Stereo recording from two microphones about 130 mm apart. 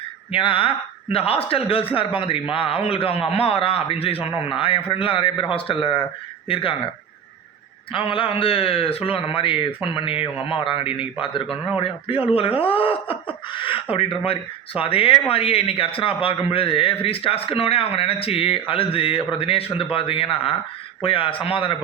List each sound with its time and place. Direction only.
0.3 s speech: 45° left (ahead or behind)
7.9 s speech: 40° left (ahead or behind)